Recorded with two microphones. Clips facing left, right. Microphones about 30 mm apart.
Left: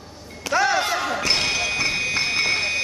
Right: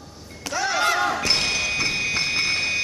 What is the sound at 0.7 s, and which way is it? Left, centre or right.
Basketball bounce, centre.